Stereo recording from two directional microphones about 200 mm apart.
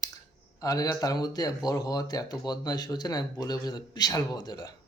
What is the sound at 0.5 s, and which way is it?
Speech, 20° left (ahead or behind).